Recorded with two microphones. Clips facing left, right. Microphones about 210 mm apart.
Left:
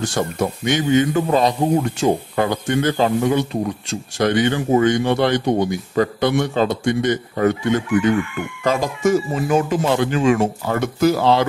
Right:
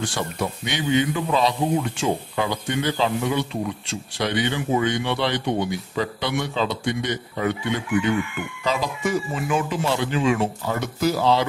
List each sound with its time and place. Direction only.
0.0 s a man's voice: 45° left (ahead or behind)